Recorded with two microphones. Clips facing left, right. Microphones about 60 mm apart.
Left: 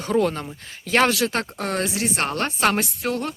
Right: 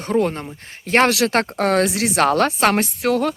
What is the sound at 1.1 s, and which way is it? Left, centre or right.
Speech, right.